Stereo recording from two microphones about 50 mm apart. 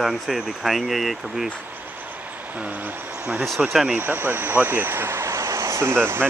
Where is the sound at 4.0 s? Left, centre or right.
Right.